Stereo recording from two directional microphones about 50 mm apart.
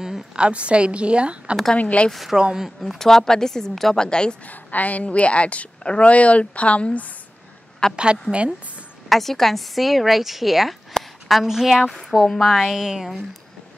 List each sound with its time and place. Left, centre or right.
0.4 s a woman's voice: right
1.8 s a woman's voice: left
2.3 s speech: centre
2.8 s a woman's voice: centre
4.5 s a woman's voice: left
7.9 s a woman's voice: centre
9.1 s a woman's voice: centre
10.9 s a sound: centre
11.8 s a woman's voice: centre